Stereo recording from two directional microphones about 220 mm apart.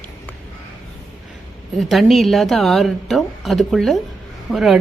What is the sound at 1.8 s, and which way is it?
A woman's voice, centre (ahead or behind).